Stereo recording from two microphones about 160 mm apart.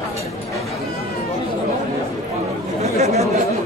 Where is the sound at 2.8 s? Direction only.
40° right (ahead or behind).